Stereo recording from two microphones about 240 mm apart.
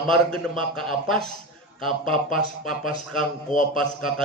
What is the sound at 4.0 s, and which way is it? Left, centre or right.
Speech, centre.